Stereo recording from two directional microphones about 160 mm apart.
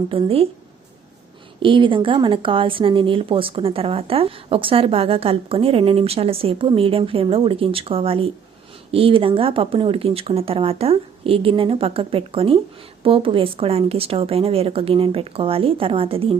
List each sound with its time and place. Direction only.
0.1 s speech: 35° right (ahead or behind)
1.6 s speech: 30° right (ahead or behind)